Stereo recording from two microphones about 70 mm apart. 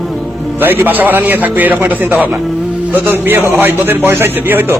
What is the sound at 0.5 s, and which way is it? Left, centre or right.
A man's voice, right.